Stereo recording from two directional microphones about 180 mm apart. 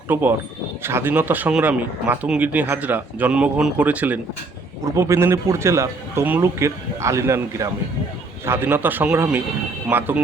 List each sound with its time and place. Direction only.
0.1 s speech: 10° right (ahead or behind)